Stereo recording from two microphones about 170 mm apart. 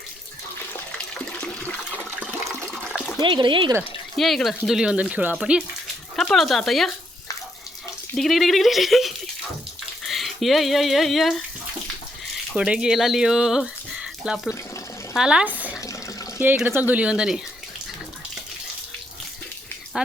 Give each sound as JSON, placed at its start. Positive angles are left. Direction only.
{"t": 0.7, "sound": "toilet flush", "side_deg": 5}
{"t": 3.2, "sound": "speech", "side_deg": -30}
{"t": 4.2, "sound": "speech", "side_deg": 0}
{"t": 8.1, "sound": "speech", "side_deg": 0}
{"t": 12.5, "sound": "speech", "side_deg": -5}
{"t": 15.8, "sound": "water", "side_deg": 20}
{"t": 16.4, "sound": "speech", "side_deg": -10}